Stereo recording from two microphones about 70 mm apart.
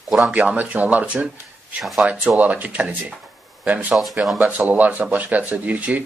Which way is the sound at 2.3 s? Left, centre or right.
Right.